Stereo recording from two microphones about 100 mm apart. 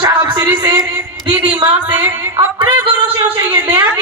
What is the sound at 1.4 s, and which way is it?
Speech, 50° right (ahead or behind).